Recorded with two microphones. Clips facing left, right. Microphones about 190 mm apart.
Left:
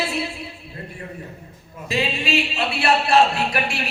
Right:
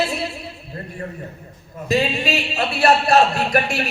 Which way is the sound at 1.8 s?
40° right (ahead or behind).